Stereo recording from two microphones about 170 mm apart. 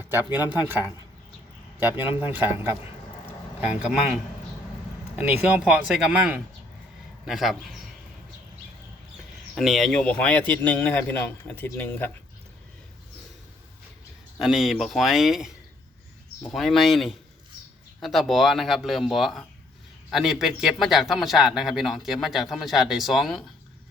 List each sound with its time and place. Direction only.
0.0 s a sound: 15° right (ahead or behind)
0.3 s speech: 25° left (ahead or behind)
0.7 s speech: 10° right (ahead or behind)
2.0 s speech: 10° right (ahead or behind)
3.8 s speech: 5° right (ahead or behind)
9.6 s a man's voice: centre (ahead or behind)
14.3 s speech: centre (ahead or behind)